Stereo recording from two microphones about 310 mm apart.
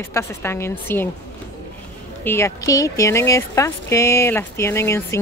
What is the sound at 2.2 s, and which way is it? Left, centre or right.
Speech, centre.